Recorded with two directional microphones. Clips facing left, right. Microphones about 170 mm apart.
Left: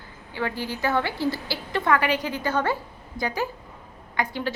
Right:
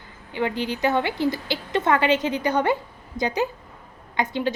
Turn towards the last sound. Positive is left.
turn(degrees=-20)  # may be behind; listen again after turning